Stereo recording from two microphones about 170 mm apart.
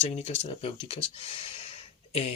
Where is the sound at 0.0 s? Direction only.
40° left (ahead or behind).